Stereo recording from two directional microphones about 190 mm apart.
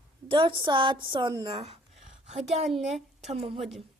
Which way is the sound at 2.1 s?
35° right (ahead or behind).